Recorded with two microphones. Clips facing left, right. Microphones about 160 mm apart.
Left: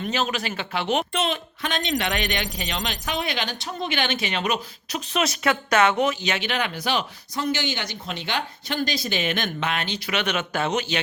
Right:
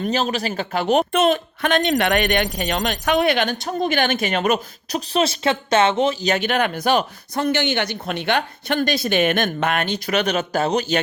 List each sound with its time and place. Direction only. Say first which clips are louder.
0.0 s speech: right 4 dB; 40° right (ahead or behind)